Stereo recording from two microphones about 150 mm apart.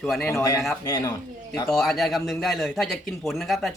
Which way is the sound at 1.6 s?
Centre (ahead or behind).